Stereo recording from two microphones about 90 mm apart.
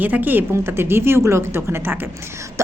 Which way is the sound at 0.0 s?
20° right (ahead or behind).